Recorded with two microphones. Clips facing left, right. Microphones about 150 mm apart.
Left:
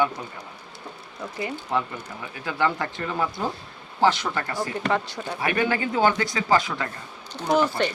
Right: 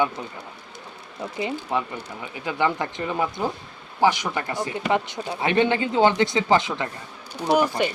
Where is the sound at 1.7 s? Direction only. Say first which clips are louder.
Even; 15° right (ahead or behind).